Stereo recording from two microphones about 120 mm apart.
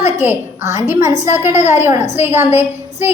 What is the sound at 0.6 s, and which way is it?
A woman's voice, 25° right (ahead or behind).